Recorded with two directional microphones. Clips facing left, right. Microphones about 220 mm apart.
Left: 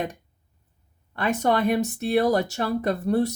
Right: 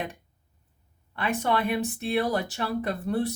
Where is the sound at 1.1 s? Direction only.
40° left (ahead or behind).